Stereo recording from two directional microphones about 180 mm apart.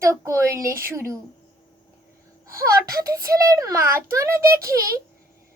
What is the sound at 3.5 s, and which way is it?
Speech, 15° right (ahead or behind).